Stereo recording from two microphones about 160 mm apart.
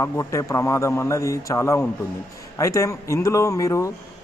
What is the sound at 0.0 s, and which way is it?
Speech, 20° left (ahead or behind).